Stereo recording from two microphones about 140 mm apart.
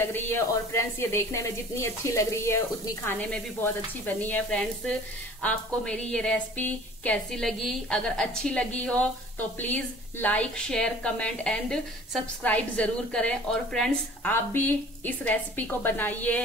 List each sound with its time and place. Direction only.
0.0 s a woman's voice: 15° left (ahead or behind)
3.1 s a woman's voice: 10° left (ahead or behind)
14.3 s a woman's voice: 15° left (ahead or behind)